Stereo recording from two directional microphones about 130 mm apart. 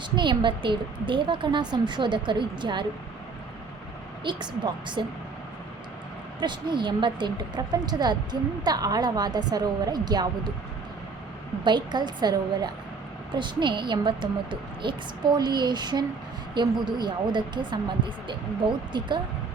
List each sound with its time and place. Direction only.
0.2 s a woman's voice: 40° right (ahead or behind)
4.2 s a woman's voice: 35° right (ahead or behind)
6.4 s a woman's voice: 35° right (ahead or behind)
11.6 s a woman's voice: 35° right (ahead or behind)